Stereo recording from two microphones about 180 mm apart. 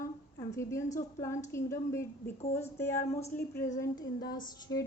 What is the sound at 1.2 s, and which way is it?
Speech, 15° left (ahead or behind).